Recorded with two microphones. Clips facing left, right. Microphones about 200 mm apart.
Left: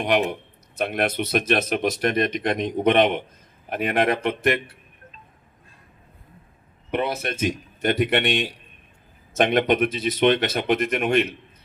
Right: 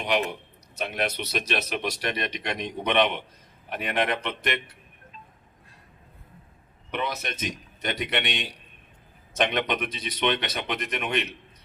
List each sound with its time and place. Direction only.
0.0 s speech: 50° left (ahead or behind)
6.9 s speech: 50° left (ahead or behind)